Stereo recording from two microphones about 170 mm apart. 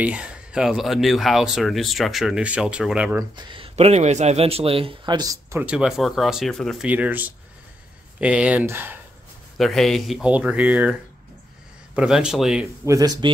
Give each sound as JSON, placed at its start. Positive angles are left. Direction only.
{"t": 0.0, "sound": "speech", "side_deg": -5}
{"t": 3.2, "sound": "speech", "side_deg": -25}
{"t": 5.6, "sound": "speech", "side_deg": -5}
{"t": 6.9, "sound": "speech", "side_deg": -10}
{"t": 9.6, "sound": "speech", "side_deg": 0}
{"t": 12.8, "sound": "speech", "side_deg": -20}